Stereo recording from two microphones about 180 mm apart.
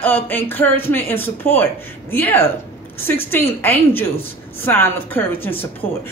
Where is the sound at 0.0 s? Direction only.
10° left (ahead or behind).